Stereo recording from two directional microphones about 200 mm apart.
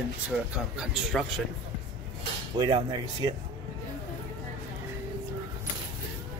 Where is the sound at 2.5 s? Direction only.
20° right (ahead or behind).